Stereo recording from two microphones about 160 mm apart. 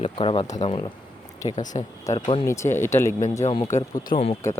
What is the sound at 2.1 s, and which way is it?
Speech, 20° left (ahead or behind).